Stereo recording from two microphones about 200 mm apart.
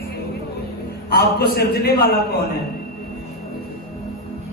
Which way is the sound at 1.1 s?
50° left (ahead or behind).